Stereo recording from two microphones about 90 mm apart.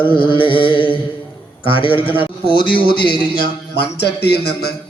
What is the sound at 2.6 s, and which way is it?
Mantra, 65° left (ahead or behind).